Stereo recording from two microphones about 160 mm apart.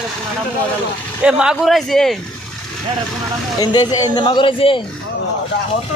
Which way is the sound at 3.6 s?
25° left (ahead or behind).